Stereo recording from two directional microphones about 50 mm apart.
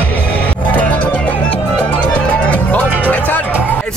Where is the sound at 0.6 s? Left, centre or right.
Left.